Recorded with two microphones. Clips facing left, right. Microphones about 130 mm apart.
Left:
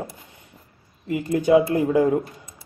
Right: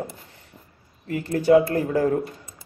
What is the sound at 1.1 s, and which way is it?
Speech, 15° left (ahead or behind).